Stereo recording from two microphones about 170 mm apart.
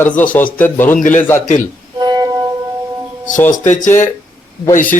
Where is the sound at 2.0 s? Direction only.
25° right (ahead or behind).